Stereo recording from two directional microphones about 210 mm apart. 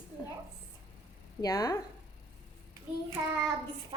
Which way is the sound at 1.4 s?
15° left (ahead or behind).